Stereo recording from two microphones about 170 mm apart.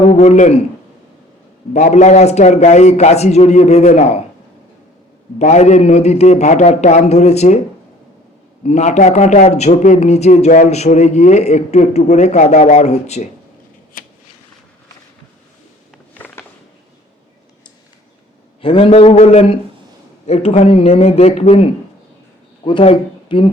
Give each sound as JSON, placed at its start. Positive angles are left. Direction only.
{"t": 0.0, "sound": "a man's voice", "side_deg": 40}
{"t": 1.7, "sound": "a man's voice", "side_deg": 40}
{"t": 5.4, "sound": "a man's voice", "side_deg": 40}
{"t": 8.6, "sound": "a man's voice", "side_deg": 40}
{"t": 16.1, "sound": "a sound", "side_deg": 10}
{"t": 18.6, "sound": "a man's voice", "side_deg": 30}
{"t": 22.6, "sound": "speech", "side_deg": 35}